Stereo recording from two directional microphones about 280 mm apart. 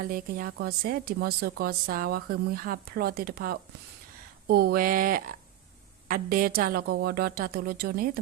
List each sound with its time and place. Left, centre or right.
0.0 s speech: right